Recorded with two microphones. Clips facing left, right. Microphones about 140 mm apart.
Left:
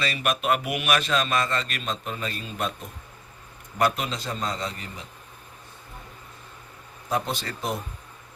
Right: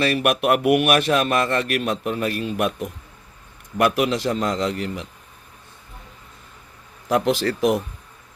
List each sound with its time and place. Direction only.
0.0 s a man's voice: 60° right (ahead or behind)
7.1 s speech: 85° right